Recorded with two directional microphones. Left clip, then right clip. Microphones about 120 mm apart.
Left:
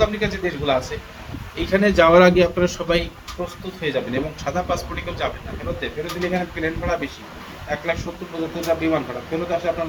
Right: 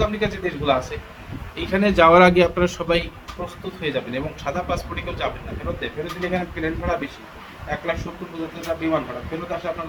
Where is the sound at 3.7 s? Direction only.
5° right (ahead or behind).